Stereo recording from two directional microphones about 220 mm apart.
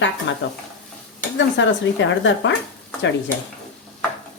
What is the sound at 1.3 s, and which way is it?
Speech, 55° left (ahead or behind).